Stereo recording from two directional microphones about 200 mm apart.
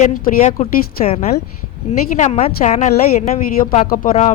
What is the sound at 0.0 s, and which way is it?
Speech, 40° left (ahead or behind).